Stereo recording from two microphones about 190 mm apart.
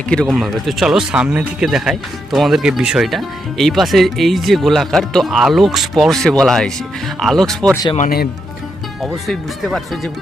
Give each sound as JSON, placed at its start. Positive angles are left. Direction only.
{"t": 0.1, "sound": "speech", "side_deg": 0}
{"t": 7.9, "sound": "speech", "side_deg": 50}
{"t": 9.0, "sound": "speech", "side_deg": 0}